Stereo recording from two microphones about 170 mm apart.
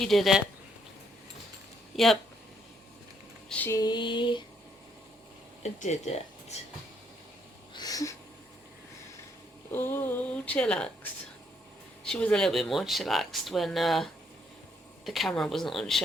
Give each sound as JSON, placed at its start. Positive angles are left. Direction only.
{"t": 0.0, "sound": "speech", "side_deg": 0}
{"t": 1.9, "sound": "speech", "side_deg": 0}
{"t": 3.5, "sound": "speech", "side_deg": 10}
{"t": 3.8, "sound": "a sound", "side_deg": 25}
{"t": 5.6, "sound": "speech", "side_deg": 40}
{"t": 7.7, "sound": "a sound", "side_deg": 25}
{"t": 9.7, "sound": "speech", "side_deg": 10}
{"t": 12.0, "sound": "speech", "side_deg": 5}